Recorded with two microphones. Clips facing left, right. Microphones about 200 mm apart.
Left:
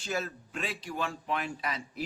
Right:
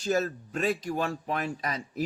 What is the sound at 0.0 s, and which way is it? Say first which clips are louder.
A man's voice: right 7 dB; 40° right (ahead or behind).